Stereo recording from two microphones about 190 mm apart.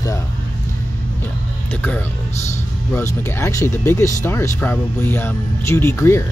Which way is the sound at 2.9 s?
15° left (ahead or behind).